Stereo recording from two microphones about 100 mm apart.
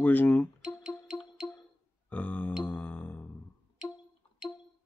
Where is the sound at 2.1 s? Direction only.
15° left (ahead or behind).